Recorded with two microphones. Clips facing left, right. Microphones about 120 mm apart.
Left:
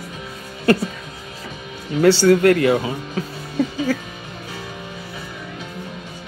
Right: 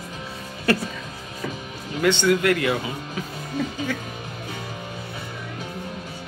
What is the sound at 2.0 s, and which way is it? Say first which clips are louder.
Speech: left 7 dB; 35° left (ahead or behind).